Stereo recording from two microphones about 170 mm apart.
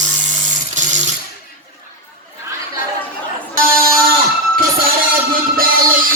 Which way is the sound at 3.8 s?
60° right (ahead or behind).